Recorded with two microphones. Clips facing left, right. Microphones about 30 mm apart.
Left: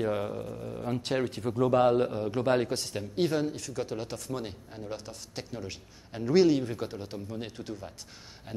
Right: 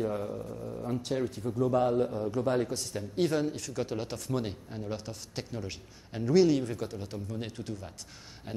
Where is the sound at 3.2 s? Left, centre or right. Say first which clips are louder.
Even; centre.